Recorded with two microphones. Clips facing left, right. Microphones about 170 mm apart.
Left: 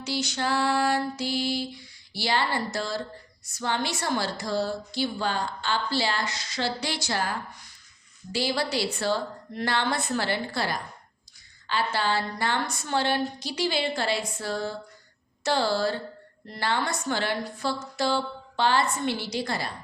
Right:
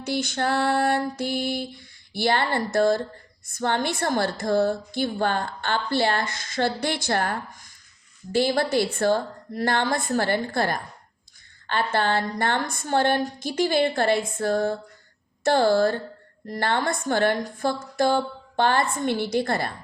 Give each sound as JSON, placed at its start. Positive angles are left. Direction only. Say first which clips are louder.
{"t": 0.0, "sound": "a woman's voice", "louder": "right 4 dB", "side_deg": -55}